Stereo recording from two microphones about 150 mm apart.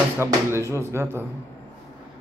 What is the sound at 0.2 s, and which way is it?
Speech, 20° right (ahead or behind).